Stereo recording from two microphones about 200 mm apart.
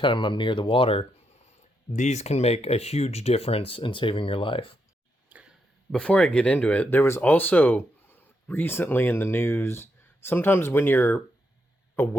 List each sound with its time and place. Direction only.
0.0 s speech: 25° left (ahead or behind)
5.3 s speech: 5° right (ahead or behind); by 12.1 s 10° left (ahead or behind)